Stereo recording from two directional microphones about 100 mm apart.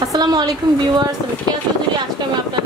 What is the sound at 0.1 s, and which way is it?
Speech, 40° right (ahead or behind).